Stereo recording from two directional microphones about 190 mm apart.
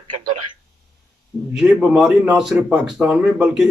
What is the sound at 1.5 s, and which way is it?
A man's voice, 5° right (ahead or behind).